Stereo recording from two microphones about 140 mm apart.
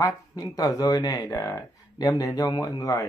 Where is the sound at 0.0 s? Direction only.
25° left (ahead or behind).